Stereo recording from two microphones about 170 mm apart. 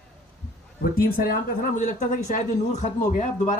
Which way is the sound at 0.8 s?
60° left (ahead or behind).